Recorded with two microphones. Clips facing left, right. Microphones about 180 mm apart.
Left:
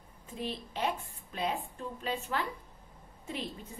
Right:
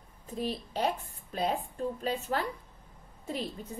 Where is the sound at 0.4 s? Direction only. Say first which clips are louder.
Right 3 dB; 40° right (ahead or behind).